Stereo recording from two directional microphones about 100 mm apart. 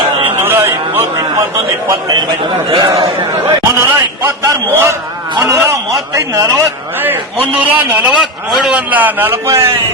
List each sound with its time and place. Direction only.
0.3 s a sound: 25° right (ahead or behind)
1.9 s a man's voice: 40° right (ahead or behind)
2.6 s a man's voice: 55° right (ahead or behind)
3.8 s a man's voice: 25° right (ahead or behind)
7.0 s a man's voice: 15° right (ahead or behind)
8.4 s a man's voice: 5° right (ahead or behind)
8.7 s a man's voice: 15° right (ahead or behind)